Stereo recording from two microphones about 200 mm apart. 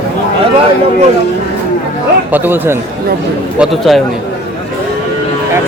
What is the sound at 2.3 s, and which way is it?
Speech, 10° right (ahead or behind).